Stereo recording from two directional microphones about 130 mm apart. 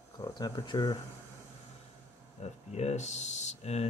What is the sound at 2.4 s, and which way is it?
Speech, 60° left (ahead or behind).